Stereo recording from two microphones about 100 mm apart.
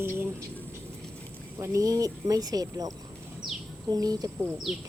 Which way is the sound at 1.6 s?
30° right (ahead or behind).